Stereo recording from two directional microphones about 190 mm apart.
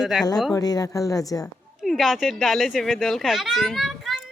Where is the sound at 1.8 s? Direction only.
Centre (ahead or behind).